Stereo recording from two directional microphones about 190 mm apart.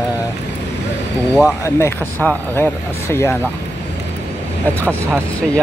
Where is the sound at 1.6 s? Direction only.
15° left (ahead or behind).